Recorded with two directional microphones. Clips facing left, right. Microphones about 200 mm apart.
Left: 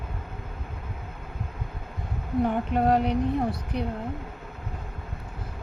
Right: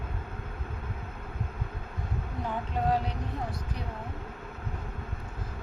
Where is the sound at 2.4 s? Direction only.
65° left (ahead or behind).